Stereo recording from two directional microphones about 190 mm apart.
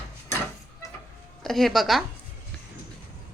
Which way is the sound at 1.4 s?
Centre (ahead or behind).